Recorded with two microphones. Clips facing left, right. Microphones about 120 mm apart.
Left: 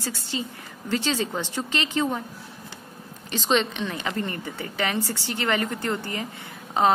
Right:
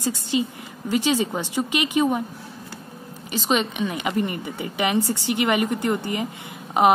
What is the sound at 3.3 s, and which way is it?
Speech, 10° right (ahead or behind).